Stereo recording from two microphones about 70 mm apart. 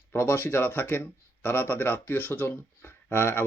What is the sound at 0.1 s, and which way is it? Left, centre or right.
Speech, left.